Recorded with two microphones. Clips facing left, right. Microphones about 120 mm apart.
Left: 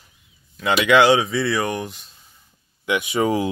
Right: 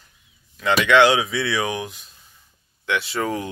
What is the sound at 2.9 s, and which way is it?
Speech, 10° left (ahead or behind).